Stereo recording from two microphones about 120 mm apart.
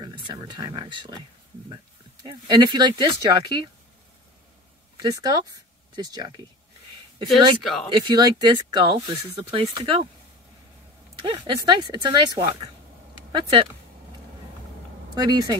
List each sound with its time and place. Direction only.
0.0 s speech: 40° right (ahead or behind)
2.2 s speech: 40° right (ahead or behind)
5.0 s speech: 35° right (ahead or behind)
7.6 s speech: centre (ahead or behind)
7.9 s speech: 40° right (ahead or behind)
11.1 s speech: 40° right (ahead or behind)
15.1 s speech: 35° right (ahead or behind)